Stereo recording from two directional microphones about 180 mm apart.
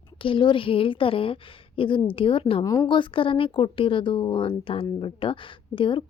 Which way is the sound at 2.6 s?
15° left (ahead or behind).